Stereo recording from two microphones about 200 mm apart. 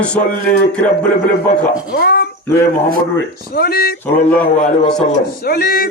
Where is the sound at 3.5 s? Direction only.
50° left (ahead or behind).